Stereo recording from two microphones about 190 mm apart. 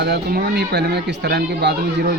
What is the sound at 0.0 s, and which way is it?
Speech, 60° right (ahead or behind).